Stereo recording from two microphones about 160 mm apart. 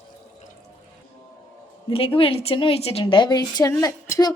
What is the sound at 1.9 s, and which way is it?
A woman's voice, 35° left (ahead or behind).